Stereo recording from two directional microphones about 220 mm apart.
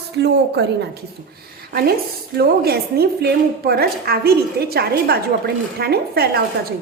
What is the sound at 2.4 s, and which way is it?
Speech, 45° right (ahead or behind).